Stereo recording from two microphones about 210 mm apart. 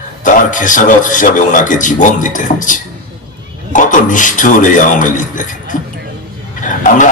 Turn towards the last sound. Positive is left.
turn(degrees=40)  # may be behind; listen again after turning